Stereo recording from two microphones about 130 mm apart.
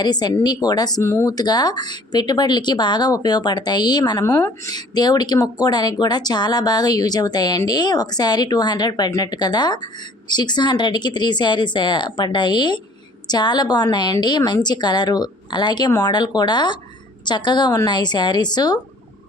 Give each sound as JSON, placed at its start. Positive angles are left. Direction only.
{"t": 0.0, "sound": "speech", "side_deg": 30}
{"t": 4.2, "sound": "speech", "side_deg": 20}
{"t": 4.7, "sound": "speech", "side_deg": 30}